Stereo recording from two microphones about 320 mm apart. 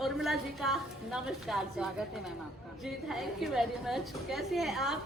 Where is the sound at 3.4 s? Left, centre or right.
Centre.